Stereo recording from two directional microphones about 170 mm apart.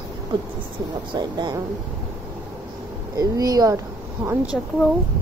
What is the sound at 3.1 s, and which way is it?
Speech, 20° right (ahead or behind).